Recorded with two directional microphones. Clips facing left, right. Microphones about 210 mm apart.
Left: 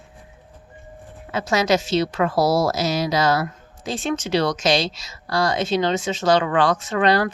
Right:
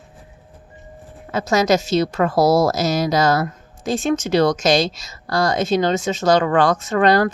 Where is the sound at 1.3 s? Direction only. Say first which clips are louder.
Right 3 dB; 45° right (ahead or behind).